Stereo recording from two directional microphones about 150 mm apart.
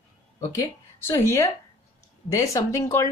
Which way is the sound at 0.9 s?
15° left (ahead or behind).